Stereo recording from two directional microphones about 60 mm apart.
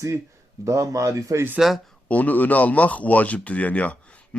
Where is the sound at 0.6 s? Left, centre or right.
Right.